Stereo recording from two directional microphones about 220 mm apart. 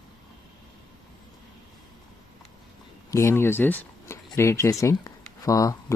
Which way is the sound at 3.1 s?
15° left (ahead or behind).